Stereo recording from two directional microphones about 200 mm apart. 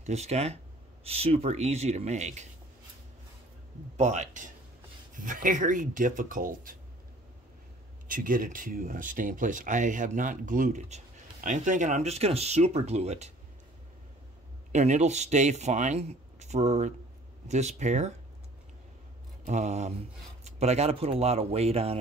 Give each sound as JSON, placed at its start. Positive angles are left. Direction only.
{"t": 0.0, "sound": "speech", "side_deg": -35}
{"t": 3.9, "sound": "speech", "side_deg": -35}
{"t": 8.1, "sound": "speech", "side_deg": -45}
{"t": 14.7, "sound": "speech", "side_deg": -35}
{"t": 19.4, "sound": "speech", "side_deg": -35}